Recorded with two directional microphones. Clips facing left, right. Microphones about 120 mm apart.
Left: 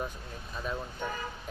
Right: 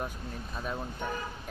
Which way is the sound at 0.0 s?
5° right (ahead or behind).